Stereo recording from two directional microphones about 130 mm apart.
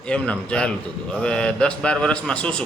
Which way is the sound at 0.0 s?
10° left (ahead or behind).